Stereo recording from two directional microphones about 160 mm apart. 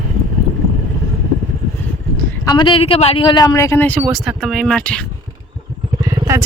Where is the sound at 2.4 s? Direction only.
25° left (ahead or behind); by 4.0 s 10° left (ahead or behind).